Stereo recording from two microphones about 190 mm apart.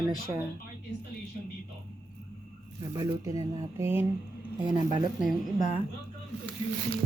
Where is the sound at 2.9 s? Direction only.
20° right (ahead or behind).